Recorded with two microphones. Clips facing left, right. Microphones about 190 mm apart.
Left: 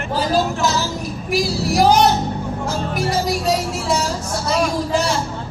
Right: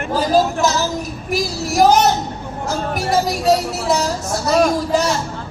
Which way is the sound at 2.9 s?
40° right (ahead or behind).